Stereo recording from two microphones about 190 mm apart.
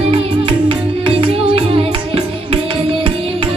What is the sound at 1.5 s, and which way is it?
Music, 30° right (ahead or behind).